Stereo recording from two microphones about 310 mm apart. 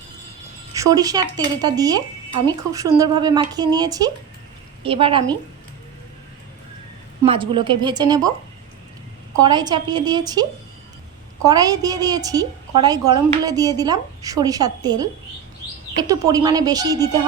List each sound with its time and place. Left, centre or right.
0.7 s a woman's voice: centre
7.2 s a woman's voice: centre
9.3 s a woman's voice: centre
11.4 s a woman's voice: centre